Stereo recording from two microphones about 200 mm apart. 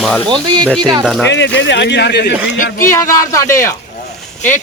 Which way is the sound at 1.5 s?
60° left (ahead or behind).